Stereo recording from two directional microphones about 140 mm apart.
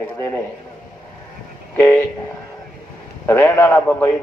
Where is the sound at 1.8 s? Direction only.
15° left (ahead or behind).